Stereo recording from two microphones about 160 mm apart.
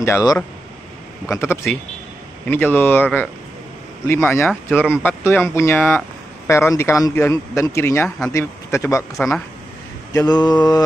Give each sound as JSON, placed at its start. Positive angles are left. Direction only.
{"t": 0.0, "sound": "mantra", "side_deg": 20}
{"t": 1.3, "sound": "speech", "side_deg": 15}
{"t": 10.1, "sound": "mantra", "side_deg": 25}